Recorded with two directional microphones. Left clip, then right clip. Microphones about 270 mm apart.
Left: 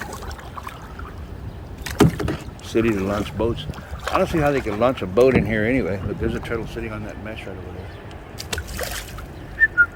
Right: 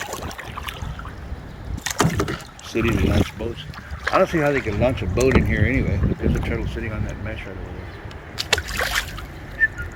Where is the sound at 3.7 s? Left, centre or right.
Left.